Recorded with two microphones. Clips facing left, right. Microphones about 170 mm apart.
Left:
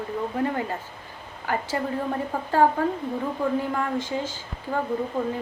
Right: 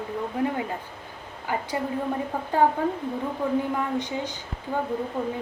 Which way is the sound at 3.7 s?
20° right (ahead or behind).